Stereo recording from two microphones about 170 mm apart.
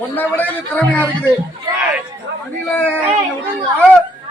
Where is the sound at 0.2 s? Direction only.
10° left (ahead or behind).